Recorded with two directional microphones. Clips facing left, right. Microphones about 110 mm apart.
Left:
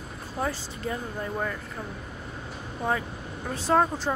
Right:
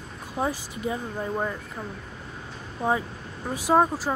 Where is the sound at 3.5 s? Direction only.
10° right (ahead or behind).